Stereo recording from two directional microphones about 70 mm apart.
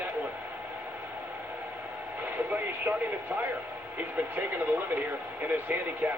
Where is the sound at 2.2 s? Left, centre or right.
Right.